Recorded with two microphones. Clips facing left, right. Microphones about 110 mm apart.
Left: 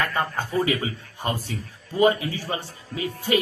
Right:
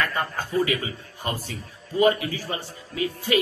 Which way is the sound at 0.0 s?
25° left (ahead or behind).